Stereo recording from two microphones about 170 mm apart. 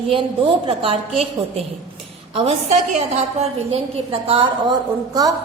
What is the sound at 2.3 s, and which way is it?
A woman's voice, 35° right (ahead or behind).